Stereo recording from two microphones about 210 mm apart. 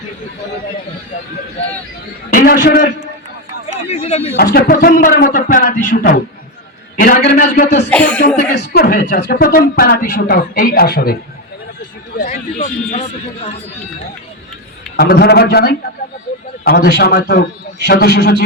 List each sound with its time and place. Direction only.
2.3 s speech: 45° left (ahead or behind)
4.0 s speech: 30° left (ahead or behind)
4.5 s a man's voice: 45° left (ahead or behind)
7.9 s speech: 5° left (ahead or behind)
8.4 s speech: 45° left (ahead or behind)
14.9 s speech: 50° left (ahead or behind)